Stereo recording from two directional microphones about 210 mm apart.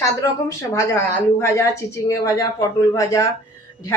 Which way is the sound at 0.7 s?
15° left (ahead or behind).